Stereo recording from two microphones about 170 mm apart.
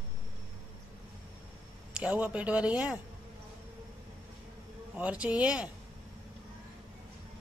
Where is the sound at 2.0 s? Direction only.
5° right (ahead or behind).